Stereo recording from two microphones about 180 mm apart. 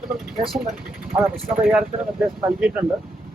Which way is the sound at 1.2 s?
5° right (ahead or behind).